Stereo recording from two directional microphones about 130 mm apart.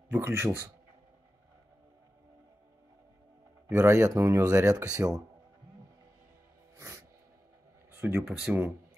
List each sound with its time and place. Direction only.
0.1 s speech: 15° right (ahead or behind)
3.6 s speech: 20° right (ahead or behind)
6.8 s music: 20° right (ahead or behind)
7.9 s speech: 15° right (ahead or behind)